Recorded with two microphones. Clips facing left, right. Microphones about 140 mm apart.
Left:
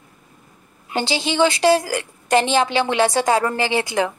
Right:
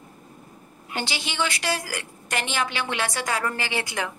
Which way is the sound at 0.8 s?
30° left (ahead or behind).